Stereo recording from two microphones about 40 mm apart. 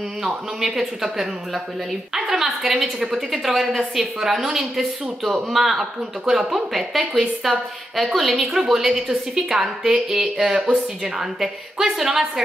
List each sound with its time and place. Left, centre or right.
0.2 s a woman's voice: centre
3.1 s a woman's voice: centre